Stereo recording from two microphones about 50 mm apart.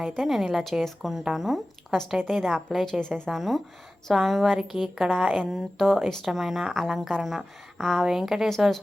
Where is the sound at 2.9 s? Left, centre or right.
Centre.